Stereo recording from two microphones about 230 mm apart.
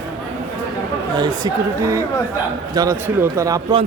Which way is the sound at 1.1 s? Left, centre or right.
Centre.